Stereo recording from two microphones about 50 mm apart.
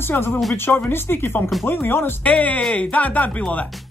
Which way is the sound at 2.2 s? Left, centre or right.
Left.